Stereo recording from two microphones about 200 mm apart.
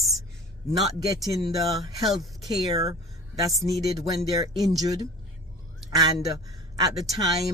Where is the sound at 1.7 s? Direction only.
Centre (ahead or behind).